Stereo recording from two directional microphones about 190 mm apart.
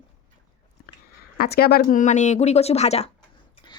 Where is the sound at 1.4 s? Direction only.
55° left (ahead or behind); by 3.1 s 35° left (ahead or behind).